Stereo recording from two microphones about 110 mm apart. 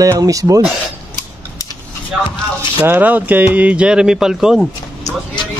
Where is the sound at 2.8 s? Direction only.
15° right (ahead or behind).